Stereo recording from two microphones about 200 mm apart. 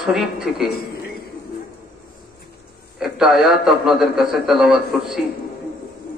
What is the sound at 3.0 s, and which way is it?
A man's voice, centre (ahead or behind).